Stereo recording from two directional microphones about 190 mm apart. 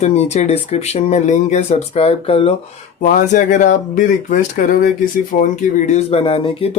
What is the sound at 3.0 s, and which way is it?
Speech, 45° left (ahead or behind).